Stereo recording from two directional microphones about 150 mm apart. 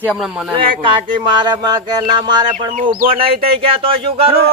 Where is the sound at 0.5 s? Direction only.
35° right (ahead or behind).